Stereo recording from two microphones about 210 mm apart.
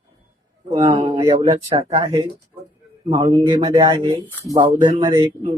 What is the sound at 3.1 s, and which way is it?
Speech, 25° right (ahead or behind).